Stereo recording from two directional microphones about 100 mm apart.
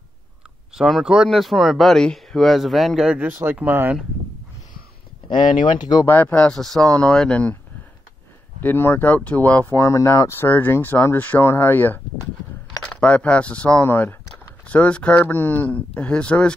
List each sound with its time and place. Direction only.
0.7 s speech: 5° right (ahead or behind)
3.4 s speech: 20° right (ahead or behind)
5.3 s speech: 50° left (ahead or behind)
6.0 s speech: 20° left (ahead or behind)
8.5 s speech: 20° left (ahead or behind)
9.8 s speech: 30° left (ahead or behind); by 16.5 s 10° left (ahead or behind)